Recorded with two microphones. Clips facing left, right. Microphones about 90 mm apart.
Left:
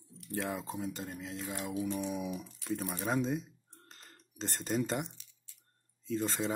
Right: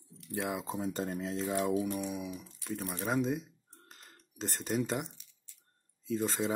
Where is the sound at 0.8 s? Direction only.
40° right (ahead or behind).